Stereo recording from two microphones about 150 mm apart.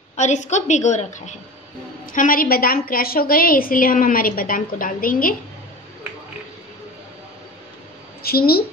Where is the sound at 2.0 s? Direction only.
65° left (ahead or behind).